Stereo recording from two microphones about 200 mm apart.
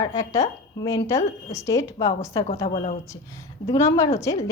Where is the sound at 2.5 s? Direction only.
20° left (ahead or behind).